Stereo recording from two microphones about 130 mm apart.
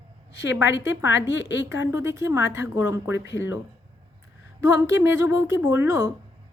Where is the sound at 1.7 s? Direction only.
20° right (ahead or behind).